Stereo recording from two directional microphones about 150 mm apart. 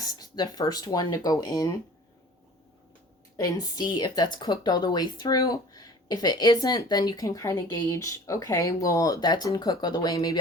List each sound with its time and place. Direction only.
0.0 s speech: 25° left (ahead or behind)
3.3 s speech: 25° left (ahead or behind)